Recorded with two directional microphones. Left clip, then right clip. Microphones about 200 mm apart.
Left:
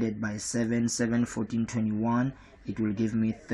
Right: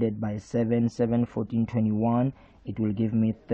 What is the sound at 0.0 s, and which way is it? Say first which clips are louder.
Speech: right 3 dB; 30° right (ahead or behind).